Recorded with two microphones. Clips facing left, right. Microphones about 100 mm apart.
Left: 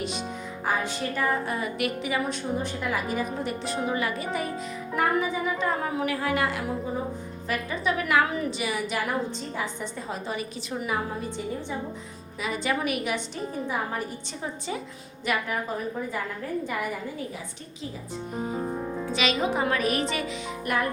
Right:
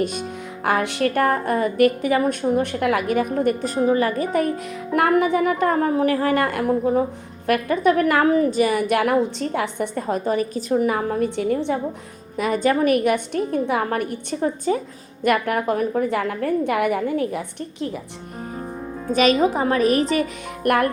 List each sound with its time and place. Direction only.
0.0 s a woman's voice: 50° right (ahead or behind)
0.6 s a woman's voice: 70° right (ahead or behind); by 4.5 s 50° right (ahead or behind)
4.9 s a woman's voice: 65° right (ahead or behind)
12.4 s a woman's voice: 50° right (ahead or behind); by 17.9 s 65° right (ahead or behind)
19.1 s a woman's voice: 45° right (ahead or behind)
20.7 s music: 60° right (ahead or behind)